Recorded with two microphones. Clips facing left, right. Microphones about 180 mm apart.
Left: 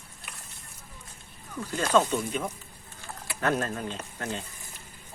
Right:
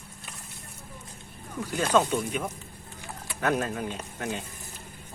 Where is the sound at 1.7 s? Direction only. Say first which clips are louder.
Even; 10° right (ahead or behind).